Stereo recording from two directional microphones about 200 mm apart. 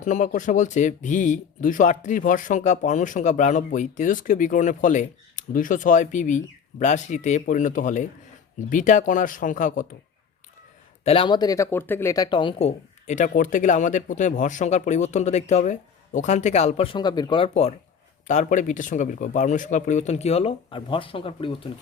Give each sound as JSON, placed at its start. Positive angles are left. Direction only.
{"t": 0.0, "sound": "speech", "side_deg": 40}
{"t": 11.0, "sound": "speech", "side_deg": 30}